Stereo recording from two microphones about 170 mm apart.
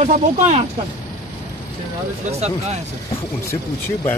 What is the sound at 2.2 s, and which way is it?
Speech, 40° right (ahead or behind).